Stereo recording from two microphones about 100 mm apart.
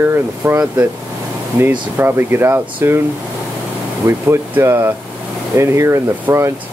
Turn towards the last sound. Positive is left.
turn(degrees=-30)  # may be behind; listen again after turning